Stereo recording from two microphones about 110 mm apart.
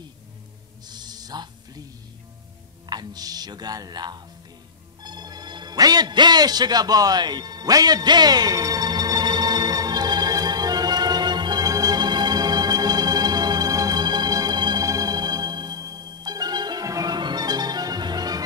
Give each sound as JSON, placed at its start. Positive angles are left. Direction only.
{"t": 0.8, "sound": "a sound", "side_deg": -40}
{"t": 2.9, "sound": "speech", "side_deg": -40}
{"t": 5.0, "sound": "music", "side_deg": -40}